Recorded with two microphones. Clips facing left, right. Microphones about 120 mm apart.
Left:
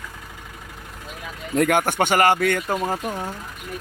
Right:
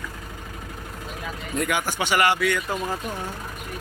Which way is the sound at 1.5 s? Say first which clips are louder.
Left 7 dB; 50° left (ahead or behind).